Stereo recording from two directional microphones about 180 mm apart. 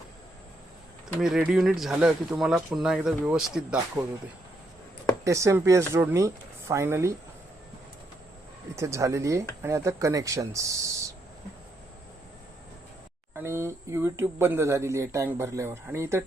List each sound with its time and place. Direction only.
1.2 s speech: 5° right (ahead or behind)
5.2 s speech: 15° right (ahead or behind)
8.7 s speech: 15° right (ahead or behind)
13.3 s speech: 15° right (ahead or behind)